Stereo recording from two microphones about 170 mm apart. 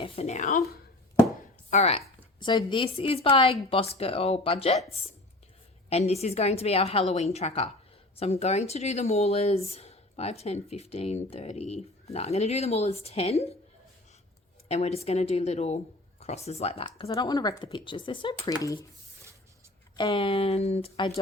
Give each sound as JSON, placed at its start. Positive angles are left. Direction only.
{"t": 0.0, "sound": "speech", "side_deg": 40}
{"t": 1.7, "sound": "speech", "side_deg": 40}
{"t": 2.4, "sound": "speech", "side_deg": 25}
{"t": 5.9, "sound": "speech", "side_deg": 40}
{"t": 14.7, "sound": "speech", "side_deg": 40}
{"t": 20.0, "sound": "speech", "side_deg": 30}